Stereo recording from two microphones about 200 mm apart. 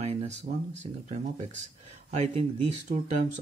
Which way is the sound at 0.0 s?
30° right (ahead or behind).